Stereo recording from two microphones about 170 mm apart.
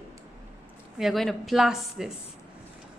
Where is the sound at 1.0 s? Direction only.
Centre (ahead or behind).